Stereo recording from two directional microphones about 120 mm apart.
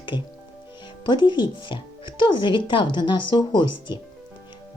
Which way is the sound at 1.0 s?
40° left (ahead or behind).